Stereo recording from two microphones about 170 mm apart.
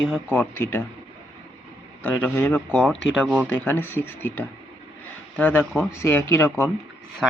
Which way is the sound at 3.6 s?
10° left (ahead or behind).